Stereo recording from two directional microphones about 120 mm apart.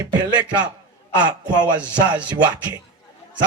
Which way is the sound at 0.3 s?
40° right (ahead or behind).